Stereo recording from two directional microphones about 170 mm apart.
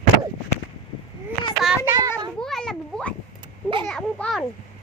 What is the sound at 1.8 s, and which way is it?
Speech, 20° right (ahead or behind).